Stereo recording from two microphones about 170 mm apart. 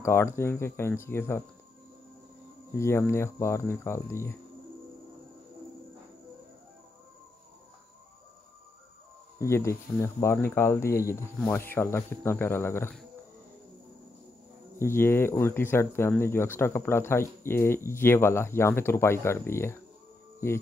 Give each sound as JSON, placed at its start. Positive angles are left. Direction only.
{"t": 0.0, "sound": "speech", "side_deg": 15}
{"t": 2.7, "sound": "speech", "side_deg": 15}
{"t": 9.4, "sound": "speech", "side_deg": 15}
{"t": 14.8, "sound": "speech", "side_deg": 15}